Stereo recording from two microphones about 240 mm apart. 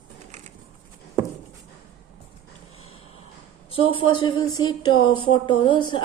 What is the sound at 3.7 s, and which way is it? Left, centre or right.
A woman's voice, left.